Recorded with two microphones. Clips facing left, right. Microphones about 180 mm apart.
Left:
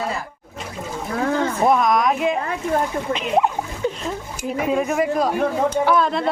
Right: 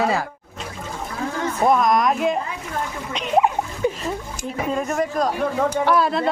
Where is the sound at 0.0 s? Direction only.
90° right.